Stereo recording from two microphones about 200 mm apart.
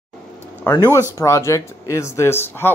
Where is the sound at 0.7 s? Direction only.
15° left (ahead or behind).